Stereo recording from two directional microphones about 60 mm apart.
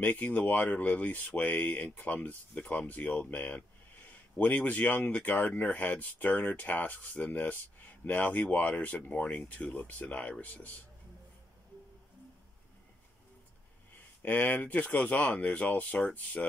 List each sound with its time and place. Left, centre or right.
0.0 s speech: left
14.2 s speech: left